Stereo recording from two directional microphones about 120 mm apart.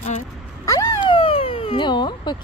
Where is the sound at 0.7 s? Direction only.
25° left (ahead or behind).